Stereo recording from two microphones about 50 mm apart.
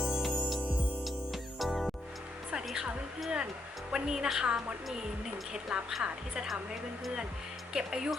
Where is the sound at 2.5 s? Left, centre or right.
Centre.